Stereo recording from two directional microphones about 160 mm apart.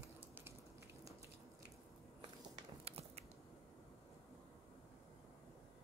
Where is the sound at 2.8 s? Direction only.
40° right (ahead or behind).